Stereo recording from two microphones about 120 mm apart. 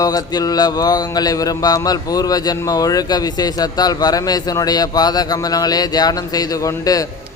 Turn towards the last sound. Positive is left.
turn(degrees=30)  # may be behind; listen again after turning